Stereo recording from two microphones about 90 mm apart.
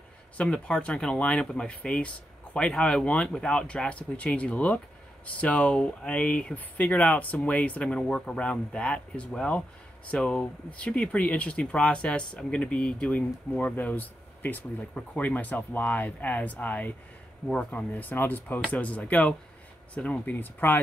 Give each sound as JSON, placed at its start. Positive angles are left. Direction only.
{"t": 0.4, "sound": "speech", "side_deg": 10}